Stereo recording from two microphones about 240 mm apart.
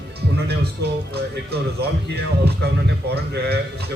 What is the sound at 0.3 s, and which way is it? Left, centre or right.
Speech, right.